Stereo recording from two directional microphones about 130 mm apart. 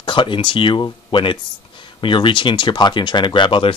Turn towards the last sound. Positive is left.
turn(degrees=40)  # may be behind; listen again after turning